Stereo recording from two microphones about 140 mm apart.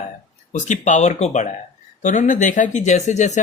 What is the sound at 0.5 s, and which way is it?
Speech, 60° left (ahead or behind).